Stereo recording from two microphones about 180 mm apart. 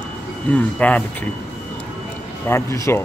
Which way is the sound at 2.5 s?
15° left (ahead or behind).